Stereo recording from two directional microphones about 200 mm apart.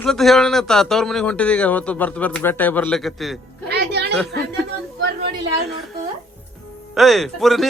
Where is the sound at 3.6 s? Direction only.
55° right (ahead or behind).